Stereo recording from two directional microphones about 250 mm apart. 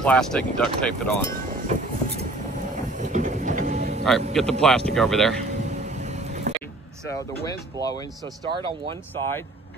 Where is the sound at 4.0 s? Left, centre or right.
Centre.